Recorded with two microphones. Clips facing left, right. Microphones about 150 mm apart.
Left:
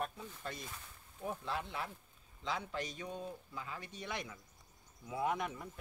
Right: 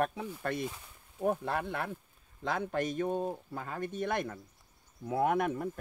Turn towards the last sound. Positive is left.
turn(degrees=-55)  # may be behind; listen again after turning